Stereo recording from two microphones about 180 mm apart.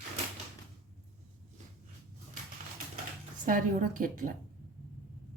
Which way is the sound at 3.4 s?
45° right (ahead or behind).